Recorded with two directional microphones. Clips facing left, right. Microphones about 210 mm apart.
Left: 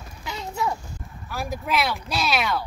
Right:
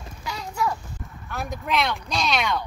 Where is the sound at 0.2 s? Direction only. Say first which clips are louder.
Even; 25° left (ahead or behind).